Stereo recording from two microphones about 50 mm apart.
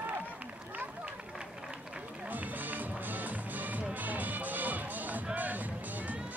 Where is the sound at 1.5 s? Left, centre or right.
Centre; by 6.2 s right.